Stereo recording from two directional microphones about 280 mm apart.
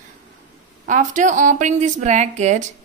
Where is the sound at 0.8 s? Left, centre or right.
Right.